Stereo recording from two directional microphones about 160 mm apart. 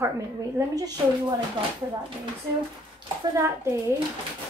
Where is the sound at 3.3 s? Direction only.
15° right (ahead or behind).